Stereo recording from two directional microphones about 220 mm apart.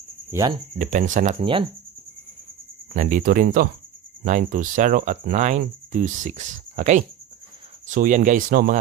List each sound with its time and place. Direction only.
0.3 s speech: 15° right (ahead or behind)
0.7 s speech: 35° right (ahead or behind)
1.4 s speech: 25° right (ahead or behind)
2.9 s speech: 35° right (ahead or behind)